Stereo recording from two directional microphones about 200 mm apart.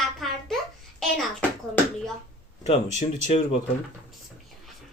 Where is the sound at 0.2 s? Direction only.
Centre (ahead or behind).